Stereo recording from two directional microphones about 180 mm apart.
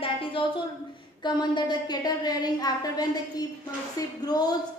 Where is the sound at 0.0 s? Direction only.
30° left (ahead or behind).